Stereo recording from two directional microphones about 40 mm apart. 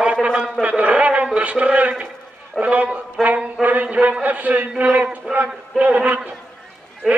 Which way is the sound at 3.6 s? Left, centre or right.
Right.